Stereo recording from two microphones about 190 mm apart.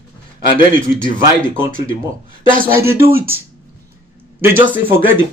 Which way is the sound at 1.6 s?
45° right (ahead or behind).